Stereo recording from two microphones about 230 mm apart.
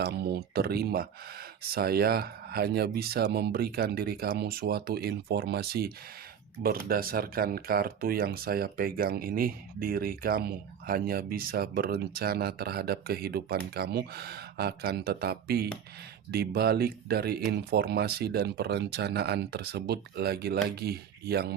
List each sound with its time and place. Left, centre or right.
0.0 s speech: right